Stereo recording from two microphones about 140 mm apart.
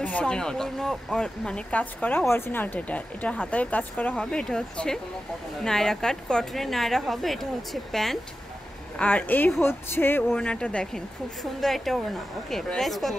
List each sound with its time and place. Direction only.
0.0 s a woman's voice: 5° left (ahead or behind)